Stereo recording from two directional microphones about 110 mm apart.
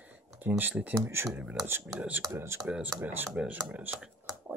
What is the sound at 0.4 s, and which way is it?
Speech, 15° right (ahead or behind).